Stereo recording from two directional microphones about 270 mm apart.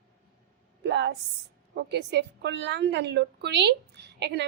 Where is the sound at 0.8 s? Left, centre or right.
Right.